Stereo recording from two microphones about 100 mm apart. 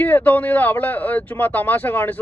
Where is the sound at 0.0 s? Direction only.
15° left (ahead or behind).